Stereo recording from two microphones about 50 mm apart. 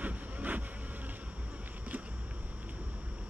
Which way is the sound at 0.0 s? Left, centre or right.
Right.